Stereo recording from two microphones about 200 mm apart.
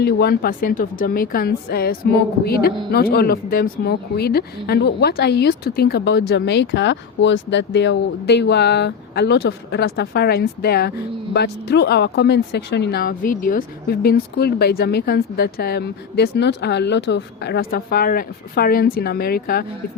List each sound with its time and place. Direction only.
0.0 s a woman's voice: 55° left (ahead or behind)